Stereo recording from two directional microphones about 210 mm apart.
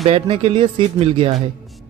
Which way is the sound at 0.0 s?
30° right (ahead or behind).